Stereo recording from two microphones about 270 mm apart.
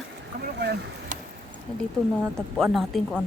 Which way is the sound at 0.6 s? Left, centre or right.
Right.